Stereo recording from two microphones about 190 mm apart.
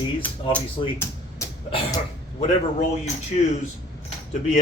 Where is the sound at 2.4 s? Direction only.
35° left (ahead or behind).